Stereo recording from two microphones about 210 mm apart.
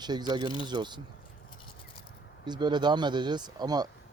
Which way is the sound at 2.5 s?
20° right (ahead or behind).